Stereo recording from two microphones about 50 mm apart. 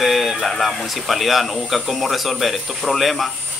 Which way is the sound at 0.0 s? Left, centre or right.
Centre.